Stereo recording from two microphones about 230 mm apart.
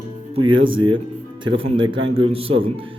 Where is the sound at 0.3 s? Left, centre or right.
Right.